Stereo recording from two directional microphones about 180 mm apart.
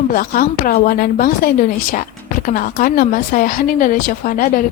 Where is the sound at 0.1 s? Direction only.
50° left (ahead or behind).